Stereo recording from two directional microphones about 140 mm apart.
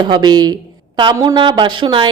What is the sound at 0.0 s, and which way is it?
A woman's voice, 30° right (ahead or behind).